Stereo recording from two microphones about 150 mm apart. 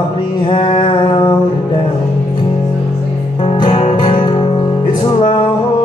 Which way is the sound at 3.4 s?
40° left (ahead or behind).